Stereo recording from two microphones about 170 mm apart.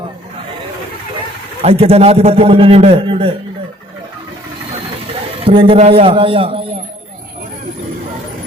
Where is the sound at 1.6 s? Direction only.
35° right (ahead or behind).